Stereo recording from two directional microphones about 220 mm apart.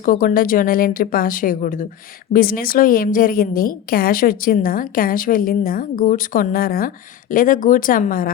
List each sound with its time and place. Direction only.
0.0 s a woman's voice: 40° left (ahead or behind)